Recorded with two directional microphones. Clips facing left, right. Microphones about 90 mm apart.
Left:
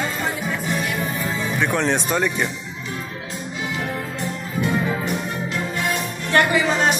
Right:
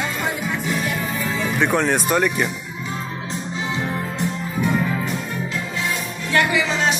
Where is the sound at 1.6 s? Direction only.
15° right (ahead or behind).